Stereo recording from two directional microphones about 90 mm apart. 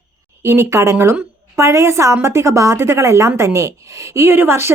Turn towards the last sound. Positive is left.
turn(degrees=-25)  # may be behind; listen again after turning